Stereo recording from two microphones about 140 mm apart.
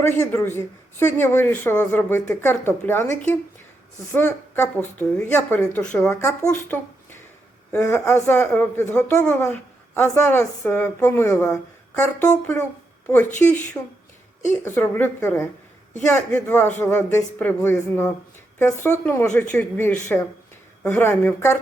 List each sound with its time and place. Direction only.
0.2 s a woman's voice: 15° left (ahead or behind)
6.2 s a woman's voice: 20° left (ahead or behind)
14.6 s a woman's voice: 15° left (ahead or behind)